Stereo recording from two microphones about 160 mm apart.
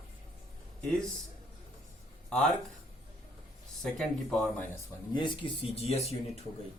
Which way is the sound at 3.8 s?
Centre (ahead or behind).